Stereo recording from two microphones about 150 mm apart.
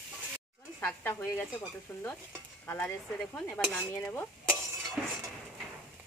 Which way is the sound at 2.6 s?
10° left (ahead or behind).